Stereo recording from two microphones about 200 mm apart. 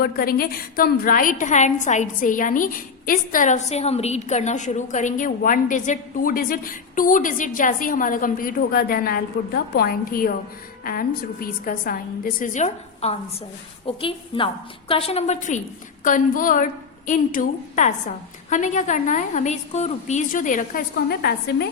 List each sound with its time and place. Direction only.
0.0 s a woman's voice: 50° left (ahead or behind)